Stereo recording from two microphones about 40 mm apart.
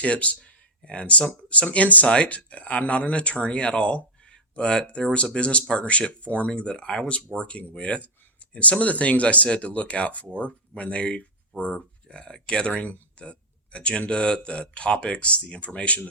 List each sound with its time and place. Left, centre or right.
0.0 s speech: left